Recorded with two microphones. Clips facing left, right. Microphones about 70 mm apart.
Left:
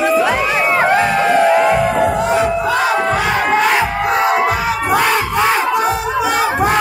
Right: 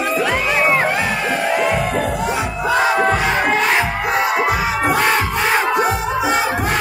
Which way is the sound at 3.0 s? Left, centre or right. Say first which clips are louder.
Left 1 dB; centre.